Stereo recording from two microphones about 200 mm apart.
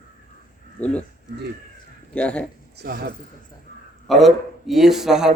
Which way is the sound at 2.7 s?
50° right (ahead or behind).